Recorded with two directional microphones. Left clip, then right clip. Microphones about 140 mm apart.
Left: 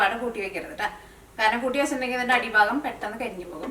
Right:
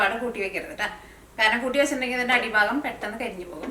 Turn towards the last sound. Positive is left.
turn(degrees=0)  # may be behind; listen again after turning